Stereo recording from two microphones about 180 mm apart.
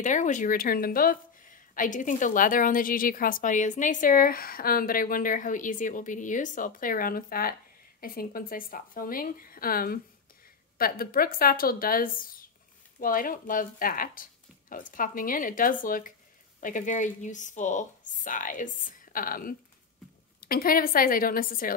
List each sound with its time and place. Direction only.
0.0 s speech: 45° left (ahead or behind)